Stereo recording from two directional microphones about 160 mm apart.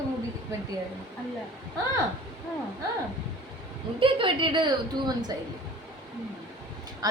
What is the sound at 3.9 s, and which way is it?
Speech, 30° right (ahead or behind).